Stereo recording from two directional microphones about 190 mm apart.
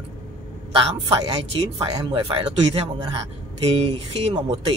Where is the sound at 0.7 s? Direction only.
25° right (ahead or behind).